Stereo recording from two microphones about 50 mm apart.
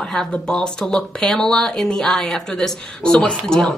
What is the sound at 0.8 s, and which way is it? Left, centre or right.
Speech, centre.